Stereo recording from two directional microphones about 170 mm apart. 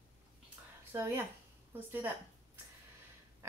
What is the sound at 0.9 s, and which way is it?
Speech, 15° right (ahead or behind).